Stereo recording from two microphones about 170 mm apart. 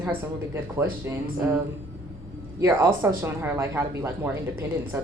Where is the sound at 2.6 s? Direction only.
15° right (ahead or behind).